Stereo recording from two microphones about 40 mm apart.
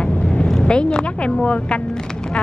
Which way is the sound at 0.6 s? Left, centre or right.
Left.